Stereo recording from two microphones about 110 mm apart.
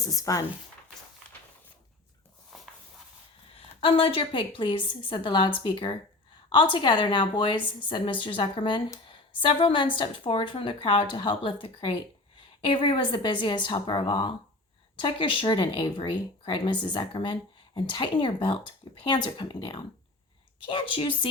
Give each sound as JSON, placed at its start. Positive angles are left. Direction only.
{"t": 0.0, "sound": "speech", "side_deg": 30}
{"t": 2.5, "sound": "a sound", "side_deg": 0}
{"t": 3.8, "sound": "a woman's voice", "side_deg": 55}